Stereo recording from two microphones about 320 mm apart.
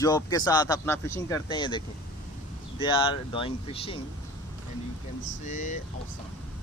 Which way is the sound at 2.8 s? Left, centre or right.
Centre.